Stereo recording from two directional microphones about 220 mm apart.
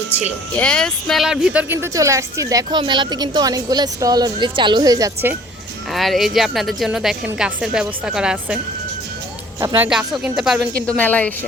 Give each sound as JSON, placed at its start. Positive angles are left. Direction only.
{"t": 0.5, "sound": "a woman's voice", "side_deg": 5}
{"t": 5.9, "sound": "a woman's voice", "side_deg": 0}
{"t": 9.6, "sound": "speech", "side_deg": -15}
{"t": 9.9, "sound": "a woman's voice", "side_deg": -5}